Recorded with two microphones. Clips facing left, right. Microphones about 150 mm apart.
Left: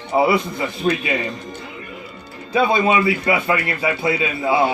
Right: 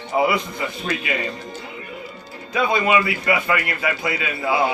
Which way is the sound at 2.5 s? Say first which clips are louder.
Left 2 dB; 30° left (ahead or behind).